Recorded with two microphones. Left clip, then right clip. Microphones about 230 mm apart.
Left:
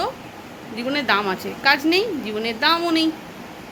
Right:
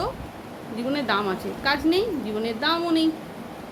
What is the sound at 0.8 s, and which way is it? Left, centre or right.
A woman's voice, centre.